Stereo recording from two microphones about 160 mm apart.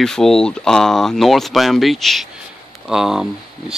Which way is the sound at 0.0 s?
5° left (ahead or behind).